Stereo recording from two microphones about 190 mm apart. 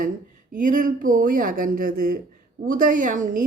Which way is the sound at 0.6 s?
45° right (ahead or behind).